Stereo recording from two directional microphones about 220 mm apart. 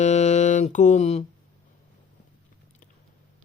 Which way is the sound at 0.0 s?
30° left (ahead or behind).